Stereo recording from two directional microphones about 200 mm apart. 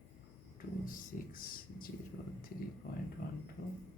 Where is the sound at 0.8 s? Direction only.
45° left (ahead or behind).